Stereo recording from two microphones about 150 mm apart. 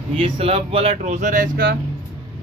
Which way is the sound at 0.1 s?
40° right (ahead or behind).